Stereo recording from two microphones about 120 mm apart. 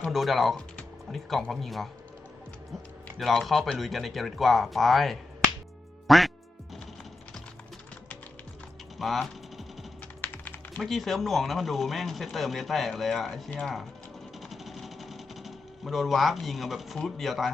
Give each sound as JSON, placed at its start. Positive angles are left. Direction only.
{"t": 0.1, "sound": "speech", "side_deg": 0}
{"t": 3.2, "sound": "speech", "side_deg": 0}
{"t": 6.1, "sound": "quack", "side_deg": 0}
{"t": 9.0, "sound": "speech", "side_deg": 0}
{"t": 10.2, "sound": "typing", "side_deg": 15}
{"t": 10.8, "sound": "speech", "side_deg": 0}
{"t": 14.5, "sound": "sewing machine", "side_deg": 0}